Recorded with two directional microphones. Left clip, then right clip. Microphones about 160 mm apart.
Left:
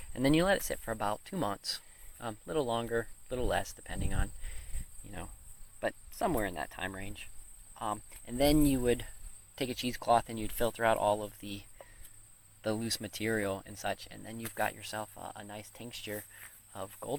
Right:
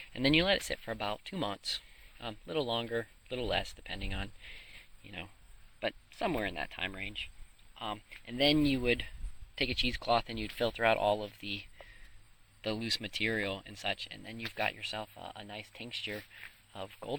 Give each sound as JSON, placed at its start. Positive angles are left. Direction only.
{"t": 0.0, "sound": "speech", "side_deg": 5}
{"t": 12.6, "sound": "speech", "side_deg": 5}
{"t": 14.0, "sound": "speech", "side_deg": 50}
{"t": 14.5, "sound": "speech", "side_deg": 0}